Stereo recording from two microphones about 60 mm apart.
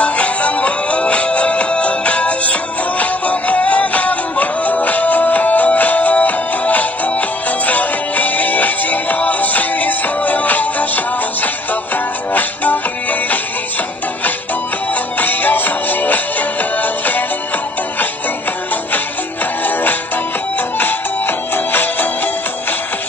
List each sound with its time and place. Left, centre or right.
0.0 s music: left
15.1 s music: left
19.6 s music: left